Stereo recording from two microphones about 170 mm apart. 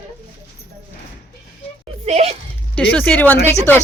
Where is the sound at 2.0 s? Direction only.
35° right (ahead or behind).